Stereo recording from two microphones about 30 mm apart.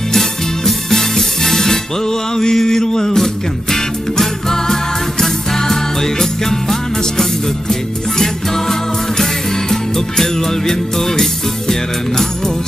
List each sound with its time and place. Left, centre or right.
0.7 s music: centre
2.3 s mantra: centre
3.7 s music: centre
9.2 s music: centre